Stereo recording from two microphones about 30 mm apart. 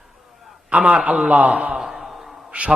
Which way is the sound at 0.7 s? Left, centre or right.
Right.